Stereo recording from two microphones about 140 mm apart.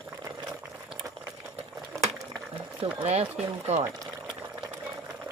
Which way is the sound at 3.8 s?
25° right (ahead or behind).